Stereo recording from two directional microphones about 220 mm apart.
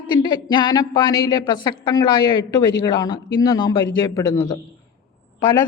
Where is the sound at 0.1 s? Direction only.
20° left (ahead or behind).